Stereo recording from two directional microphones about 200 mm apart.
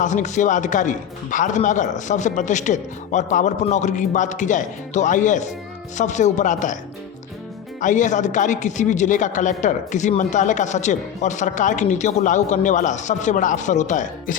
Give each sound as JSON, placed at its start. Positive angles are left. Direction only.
{"t": 0.0, "sound": "a man's voice", "side_deg": 35}
{"t": 7.8, "sound": "a man's voice", "side_deg": 40}